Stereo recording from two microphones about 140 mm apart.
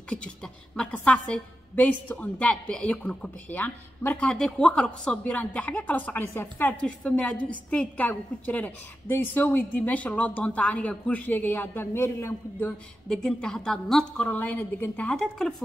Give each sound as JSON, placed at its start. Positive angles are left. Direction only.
{"t": 0.1, "sound": "a woman's voice", "side_deg": 5}